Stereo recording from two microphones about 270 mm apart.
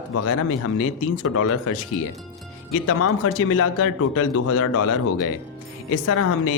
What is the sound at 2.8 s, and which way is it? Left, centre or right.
A woman's voice, left.